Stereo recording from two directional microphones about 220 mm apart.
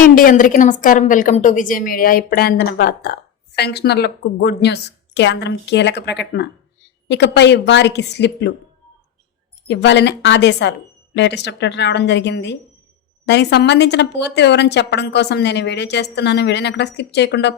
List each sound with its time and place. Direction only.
0.0 s a woman's voice: 40° left (ahead or behind)
9.6 s a woman's voice: 50° left (ahead or behind)